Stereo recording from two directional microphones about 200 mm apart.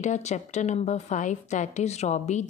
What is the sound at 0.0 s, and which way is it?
A woman's voice, 35° left (ahead or behind).